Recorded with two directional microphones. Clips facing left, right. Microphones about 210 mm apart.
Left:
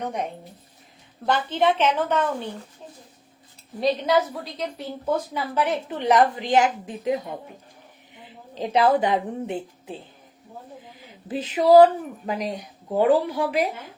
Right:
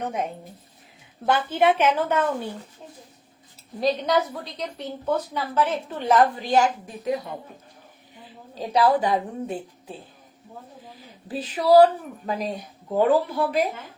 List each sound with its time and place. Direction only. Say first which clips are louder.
1.2 s a woman's voice: right 1 dB; 5° right (ahead or behind)
3.8 s a woman's voice: left 1 dB; centre (ahead or behind); by 7.2 s 20° left (ahead or behind)
8.5 s a woman's voice: left 1 dB; 20° left (ahead or behind)
11.3 s speech: left 2 dB; 20° left (ahead or behind)